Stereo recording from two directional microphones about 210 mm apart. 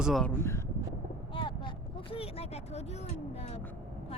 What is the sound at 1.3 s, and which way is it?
Vehicle, 25° left (ahead or behind).